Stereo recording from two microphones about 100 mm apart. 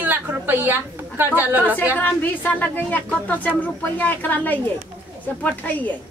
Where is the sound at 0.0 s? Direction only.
15° right (ahead or behind).